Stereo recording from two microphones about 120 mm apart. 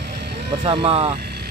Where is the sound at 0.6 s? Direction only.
55° right (ahead or behind).